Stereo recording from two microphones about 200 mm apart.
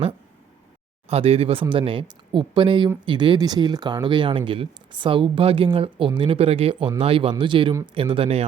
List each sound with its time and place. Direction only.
1.1 s speech: 30° right (ahead or behind)